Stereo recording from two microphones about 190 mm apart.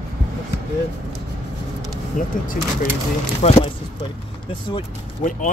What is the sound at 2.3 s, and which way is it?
Speech, 45° left (ahead or behind).